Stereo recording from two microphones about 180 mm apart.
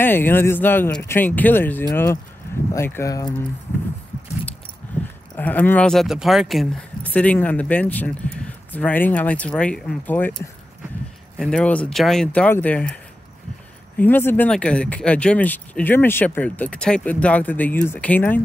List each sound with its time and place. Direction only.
0.0 s speech: 10° left (ahead or behind)
5.3 s speech: 10° left (ahead or behind)
11.3 s speech: 5° left (ahead or behind)